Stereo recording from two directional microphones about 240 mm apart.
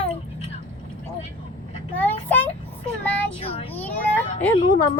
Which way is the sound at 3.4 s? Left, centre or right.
Left.